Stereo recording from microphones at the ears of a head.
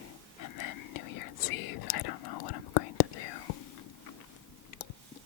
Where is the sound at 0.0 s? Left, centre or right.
Left.